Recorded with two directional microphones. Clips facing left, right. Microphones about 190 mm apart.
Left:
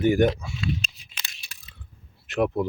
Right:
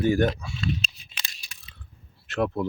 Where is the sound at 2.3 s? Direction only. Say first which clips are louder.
Left 2 dB; 15° left (ahead or behind).